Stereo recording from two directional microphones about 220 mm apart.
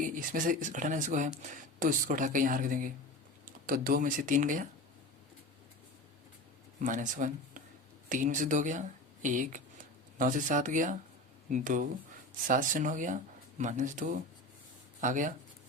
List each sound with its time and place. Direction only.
0.0 s speech: 35° right (ahead or behind)
6.8 s speech: 35° right (ahead or behind)